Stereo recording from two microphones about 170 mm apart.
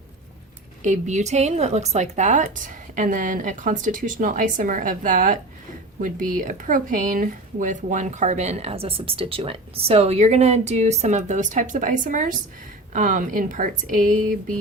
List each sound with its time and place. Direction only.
0.8 s speech: 45° right (ahead or behind)